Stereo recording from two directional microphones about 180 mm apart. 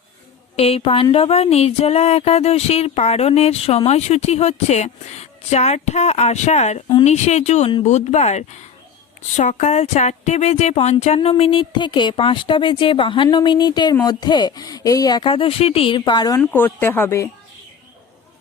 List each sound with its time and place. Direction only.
0.5 s a sound: 35° left (ahead or behind)
9.3 s speech: 40° left (ahead or behind); by 16.4 s 20° left (ahead or behind)
16.4 s speech: 10° left (ahead or behind)